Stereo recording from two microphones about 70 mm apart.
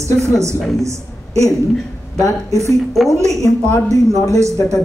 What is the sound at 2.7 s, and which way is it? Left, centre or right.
Speech, centre.